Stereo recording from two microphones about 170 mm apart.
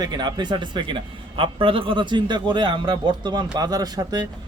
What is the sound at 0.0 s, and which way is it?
Speech, 25° right (ahead or behind).